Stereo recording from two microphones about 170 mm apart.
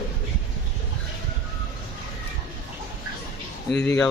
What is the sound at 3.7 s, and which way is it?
Speech, 5° left (ahead or behind).